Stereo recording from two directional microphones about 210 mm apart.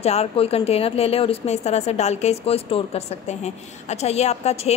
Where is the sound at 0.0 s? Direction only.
30° left (ahead or behind).